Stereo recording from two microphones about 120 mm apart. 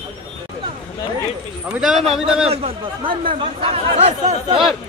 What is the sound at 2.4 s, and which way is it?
Speech, 55° right (ahead or behind).